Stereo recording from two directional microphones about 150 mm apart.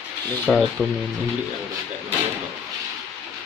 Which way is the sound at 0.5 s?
Centre (ahead or behind).